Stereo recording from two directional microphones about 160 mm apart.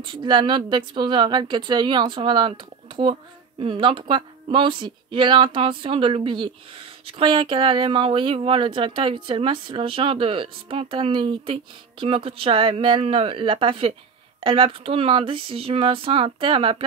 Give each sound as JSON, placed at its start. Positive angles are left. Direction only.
{"t": 0.0, "sound": "a woman's voice", "side_deg": -30}